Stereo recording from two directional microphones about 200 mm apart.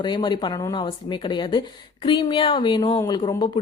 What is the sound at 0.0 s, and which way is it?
Speech, 20° left (ahead or behind).